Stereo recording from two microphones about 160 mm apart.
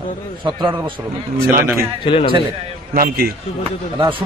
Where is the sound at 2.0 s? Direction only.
30° left (ahead or behind).